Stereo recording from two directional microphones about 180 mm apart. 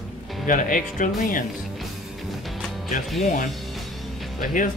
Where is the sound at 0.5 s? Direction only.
50° left (ahead or behind).